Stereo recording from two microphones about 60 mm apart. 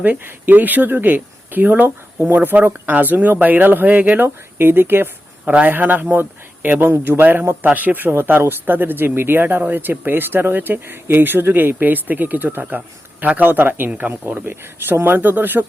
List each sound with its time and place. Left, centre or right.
0.0 s speech: right